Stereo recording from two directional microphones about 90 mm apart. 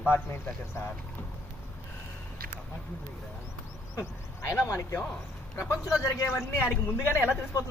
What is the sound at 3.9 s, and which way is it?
A man's voice, 30° left (ahead or behind).